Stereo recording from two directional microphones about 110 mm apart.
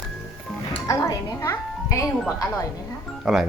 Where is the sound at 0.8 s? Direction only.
30° left (ahead or behind).